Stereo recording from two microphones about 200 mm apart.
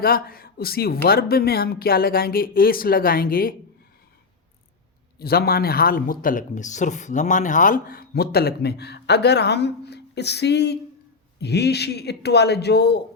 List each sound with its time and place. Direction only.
0.0 s speech: 50° left (ahead or behind)
5.2 s speech: 50° left (ahead or behind)